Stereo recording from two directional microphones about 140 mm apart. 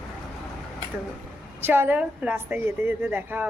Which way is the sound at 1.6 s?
15° right (ahead or behind).